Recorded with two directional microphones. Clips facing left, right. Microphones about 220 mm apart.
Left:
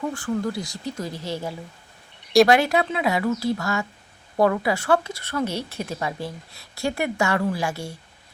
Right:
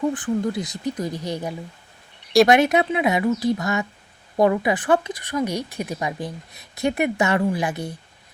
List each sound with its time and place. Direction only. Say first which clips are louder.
0.0 s speech: right 3 dB; 20° right (ahead or behind)